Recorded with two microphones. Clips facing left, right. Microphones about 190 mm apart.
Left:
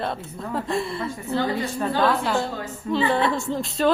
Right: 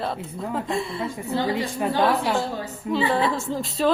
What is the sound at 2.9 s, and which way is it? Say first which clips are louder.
A man's voice: left 1 dB; 5° right (ahead or behind).